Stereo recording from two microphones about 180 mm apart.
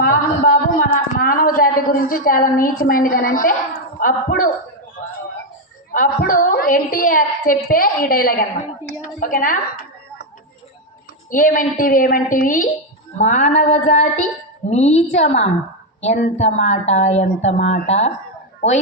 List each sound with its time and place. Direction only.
0.0 s a sound: 50° left (ahead or behind)
4.0 s a woman's voice: 50° left (ahead or behind)
5.9 s a woman's voice: 50° left (ahead or behind)
11.3 s a woman's voice: 50° left (ahead or behind)